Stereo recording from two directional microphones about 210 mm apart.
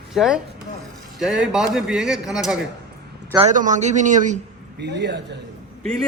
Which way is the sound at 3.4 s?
35° right (ahead or behind).